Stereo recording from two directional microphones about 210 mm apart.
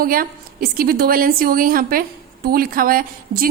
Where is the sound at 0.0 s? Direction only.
45° right (ahead or behind).